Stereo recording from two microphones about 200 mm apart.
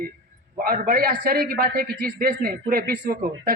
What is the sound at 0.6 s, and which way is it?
A man's voice, 45° right (ahead or behind).